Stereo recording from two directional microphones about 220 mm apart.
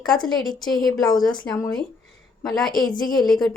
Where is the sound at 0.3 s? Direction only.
Centre (ahead or behind).